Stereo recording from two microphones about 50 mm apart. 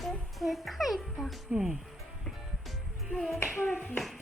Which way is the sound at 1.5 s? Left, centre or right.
Centre.